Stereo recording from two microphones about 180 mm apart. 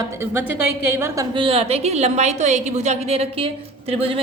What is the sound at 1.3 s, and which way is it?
A woman's voice, 30° right (ahead or behind).